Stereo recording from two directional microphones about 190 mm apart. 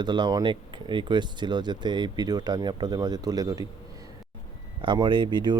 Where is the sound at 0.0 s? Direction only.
20° right (ahead or behind).